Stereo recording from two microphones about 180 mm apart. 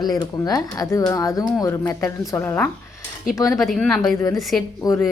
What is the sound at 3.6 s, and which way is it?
Speech, centre (ahead or behind).